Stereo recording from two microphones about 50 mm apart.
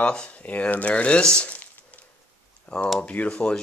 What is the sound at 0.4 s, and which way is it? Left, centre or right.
Speech, left.